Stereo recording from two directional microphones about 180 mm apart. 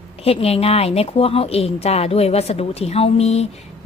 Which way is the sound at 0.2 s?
35° left (ahead or behind).